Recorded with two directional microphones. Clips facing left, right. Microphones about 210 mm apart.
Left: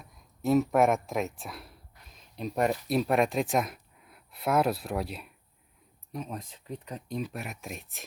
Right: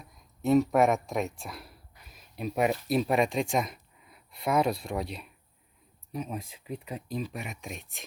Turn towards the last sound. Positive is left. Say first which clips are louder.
# even
turn(degrees=0)  # may be behind; listen again after turning